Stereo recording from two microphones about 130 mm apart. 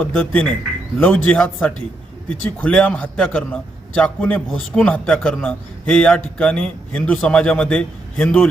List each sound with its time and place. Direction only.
0.0 s a man's voice: 15° left (ahead or behind)
2.6 s a man's voice: 10° left (ahead or behind)